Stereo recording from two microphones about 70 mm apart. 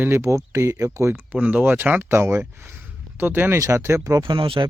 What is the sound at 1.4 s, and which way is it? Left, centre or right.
Speech, centre.